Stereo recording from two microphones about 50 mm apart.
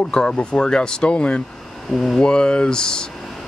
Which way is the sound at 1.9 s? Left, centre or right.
Centre.